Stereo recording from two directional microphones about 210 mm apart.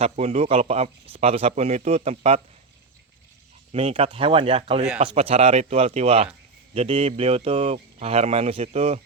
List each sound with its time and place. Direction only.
0.0 s speech: 30° right (ahead or behind)
3.7 s speech: 30° right (ahead or behind)